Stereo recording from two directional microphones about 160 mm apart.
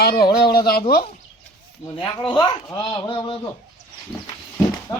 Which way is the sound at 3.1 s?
35° left (ahead or behind).